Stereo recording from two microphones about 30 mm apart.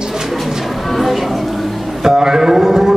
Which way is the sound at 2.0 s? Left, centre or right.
Right.